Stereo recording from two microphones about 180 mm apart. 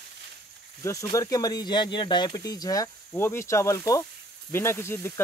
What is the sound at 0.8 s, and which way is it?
Speech, 20° left (ahead or behind).